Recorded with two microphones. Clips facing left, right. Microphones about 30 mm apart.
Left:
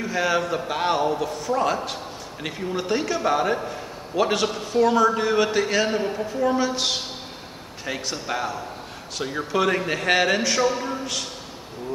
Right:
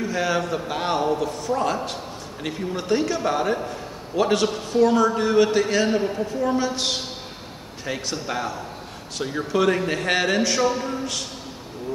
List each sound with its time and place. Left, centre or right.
0.0 s a man's voice: centre